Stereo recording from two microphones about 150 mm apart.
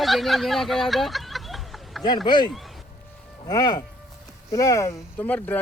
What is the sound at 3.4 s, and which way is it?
Speech, 25° left (ahead or behind).